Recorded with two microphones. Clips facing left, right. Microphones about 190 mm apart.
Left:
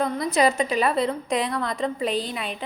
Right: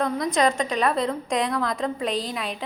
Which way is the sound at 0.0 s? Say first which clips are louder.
Left 1 dB; 5° left (ahead or behind).